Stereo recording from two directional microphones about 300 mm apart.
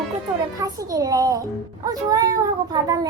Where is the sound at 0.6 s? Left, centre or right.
Centre.